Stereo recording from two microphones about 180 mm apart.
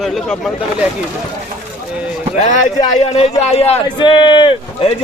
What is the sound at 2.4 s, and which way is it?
A man's voice, 45° left (ahead or behind).